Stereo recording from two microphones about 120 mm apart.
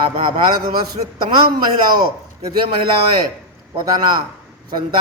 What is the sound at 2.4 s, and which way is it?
Speech, 35° right (ahead or behind).